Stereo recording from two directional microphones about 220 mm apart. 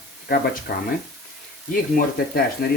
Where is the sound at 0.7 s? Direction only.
45° left (ahead or behind).